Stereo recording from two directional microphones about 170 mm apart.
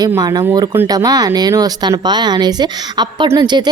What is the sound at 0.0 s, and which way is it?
Speech, 20° right (ahead or behind).